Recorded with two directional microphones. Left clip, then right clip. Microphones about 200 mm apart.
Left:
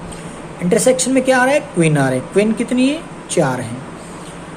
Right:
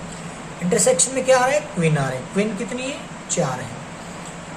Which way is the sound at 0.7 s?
40° left (ahead or behind).